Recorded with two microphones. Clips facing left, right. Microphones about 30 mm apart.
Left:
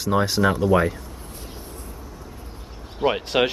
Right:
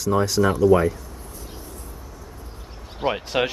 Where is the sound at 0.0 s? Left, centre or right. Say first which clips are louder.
Even; left.